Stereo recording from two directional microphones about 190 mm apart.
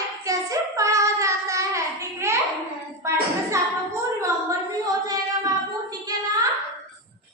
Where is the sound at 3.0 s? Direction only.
15° right (ahead or behind).